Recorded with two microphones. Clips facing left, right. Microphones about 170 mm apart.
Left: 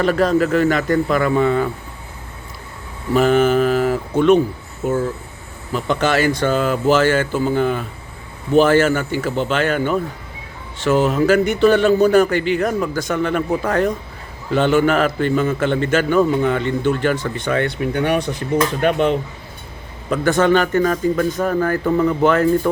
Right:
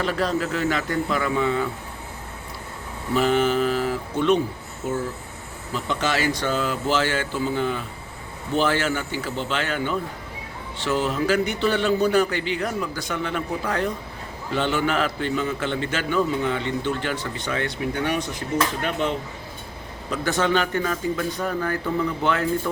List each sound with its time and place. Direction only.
0.0 s a man's voice: 50° left (ahead or behind)
3.2 s mantra: 50° left (ahead or behind)
4.8 s a man's voice: 55° left (ahead or behind)
20.1 s a man's voice: 50° left (ahead or behind)